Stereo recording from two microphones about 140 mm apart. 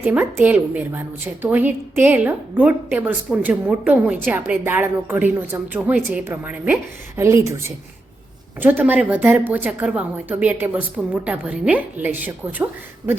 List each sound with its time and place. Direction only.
0.0 s a woman's voice: 15° right (ahead or behind)